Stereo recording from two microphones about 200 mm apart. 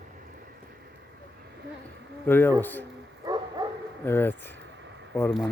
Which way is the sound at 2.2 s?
10° left (ahead or behind).